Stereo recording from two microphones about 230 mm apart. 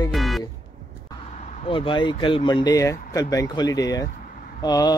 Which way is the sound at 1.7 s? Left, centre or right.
Left.